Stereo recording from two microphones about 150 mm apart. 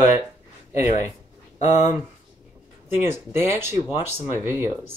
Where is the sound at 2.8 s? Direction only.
15° right (ahead or behind).